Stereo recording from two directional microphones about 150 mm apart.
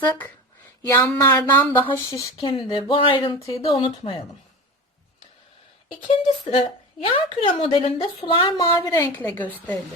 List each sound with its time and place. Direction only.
0.0 s a woman's voice: 10° left (ahead or behind)
2.4 s a woman's voice: 35° left (ahead or behind)
3.3 s speech: 20° left (ahead or behind)
3.7 s a woman's voice: 35° left (ahead or behind)
6.1 s a woman's voice: 40° left (ahead or behind)
9.0 s a woman's voice: 15° left (ahead or behind)